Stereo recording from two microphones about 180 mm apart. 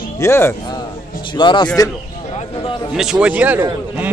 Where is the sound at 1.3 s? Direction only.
25° left (ahead or behind).